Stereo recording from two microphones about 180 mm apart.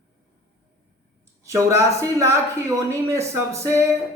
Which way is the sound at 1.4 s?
15° right (ahead or behind).